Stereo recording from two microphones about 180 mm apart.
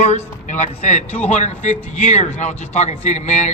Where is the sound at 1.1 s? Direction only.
10° left (ahead or behind).